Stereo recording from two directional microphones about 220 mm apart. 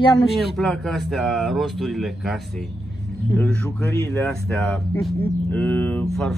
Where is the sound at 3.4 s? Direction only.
5° left (ahead or behind).